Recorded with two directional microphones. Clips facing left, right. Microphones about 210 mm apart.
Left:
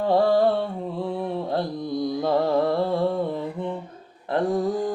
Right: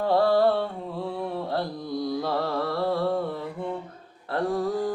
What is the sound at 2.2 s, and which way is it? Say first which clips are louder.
Music: left 6 dB; 20° left (ahead or behind).